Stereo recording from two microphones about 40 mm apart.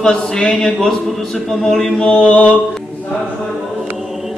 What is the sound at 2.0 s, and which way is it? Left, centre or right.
Mantra, left.